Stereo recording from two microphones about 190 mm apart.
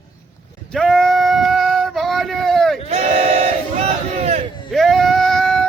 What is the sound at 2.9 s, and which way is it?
Crowd, 30° right (ahead or behind).